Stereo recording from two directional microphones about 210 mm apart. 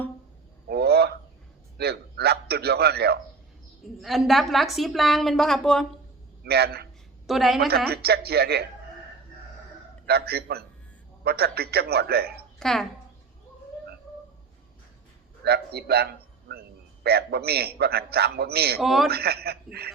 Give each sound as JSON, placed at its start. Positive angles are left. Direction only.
{"t": 0.7, "sound": "a sound", "side_deg": -50}
{"t": 1.8, "sound": "a man's voice", "side_deg": -50}
{"t": 4.0, "sound": "a woman's voice", "side_deg": 0}
{"t": 6.4, "sound": "a man's voice", "side_deg": -50}
{"t": 7.3, "sound": "a woman's voice", "side_deg": 0}
{"t": 7.9, "sound": "a man's voice", "side_deg": -50}
{"t": 10.1, "sound": "a man's voice", "side_deg": -50}
{"t": 12.5, "sound": "a woman's voice", "side_deg": 0}
{"t": 15.4, "sound": "a man's voice", "side_deg": -50}
{"t": 18.8, "sound": "a woman's voice", "side_deg": 0}
{"t": 19.0, "sound": "a man's voice", "side_deg": -50}